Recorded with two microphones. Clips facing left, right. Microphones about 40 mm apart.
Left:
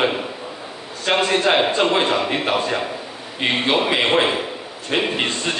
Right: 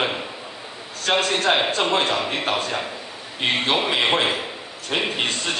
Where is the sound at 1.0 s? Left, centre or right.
Centre.